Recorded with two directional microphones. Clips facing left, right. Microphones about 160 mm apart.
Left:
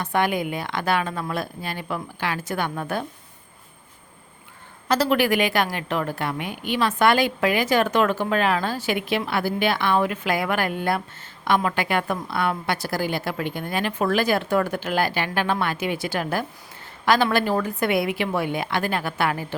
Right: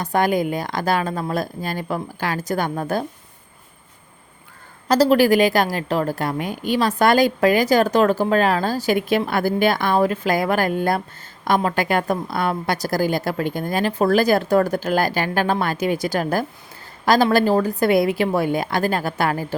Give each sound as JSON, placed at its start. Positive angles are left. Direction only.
{"t": 0.0, "sound": "a woman's voice", "side_deg": -40}
{"t": 4.9, "sound": "a woman's voice", "side_deg": -35}